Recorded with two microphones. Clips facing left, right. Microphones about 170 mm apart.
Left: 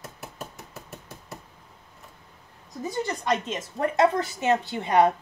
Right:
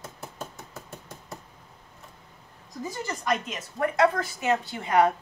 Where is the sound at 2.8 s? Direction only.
25° left (ahead or behind).